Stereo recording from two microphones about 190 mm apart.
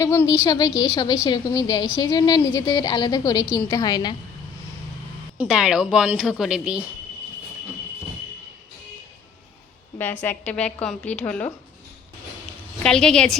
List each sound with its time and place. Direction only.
0.0 s a woman's voice: 15° left (ahead or behind)
5.4 s speech: 5° right (ahead or behind)
10.0 s a woman's voice: 10° left (ahead or behind)
12.8 s speech: 5° left (ahead or behind)